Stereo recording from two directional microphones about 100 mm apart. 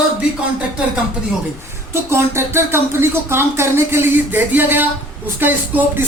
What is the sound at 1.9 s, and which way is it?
Speech, 25° right (ahead or behind).